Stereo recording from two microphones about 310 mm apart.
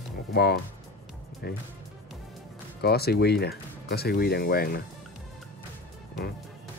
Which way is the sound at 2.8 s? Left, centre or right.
Left.